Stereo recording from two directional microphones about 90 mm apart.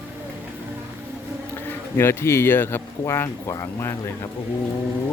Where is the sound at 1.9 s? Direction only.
25° left (ahead or behind).